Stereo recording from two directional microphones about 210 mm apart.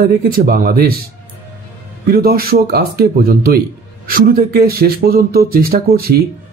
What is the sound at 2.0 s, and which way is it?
Speech, 45° right (ahead or behind).